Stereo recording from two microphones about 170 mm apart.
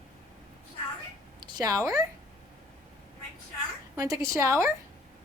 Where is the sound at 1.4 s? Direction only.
20° right (ahead or behind).